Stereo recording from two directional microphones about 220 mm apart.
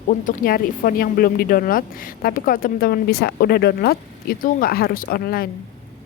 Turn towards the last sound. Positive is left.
turn(degrees=45)  # may be behind; listen again after turning